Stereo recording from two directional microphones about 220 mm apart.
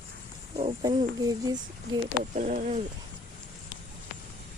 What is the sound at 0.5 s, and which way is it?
Speech, 20° right (ahead or behind).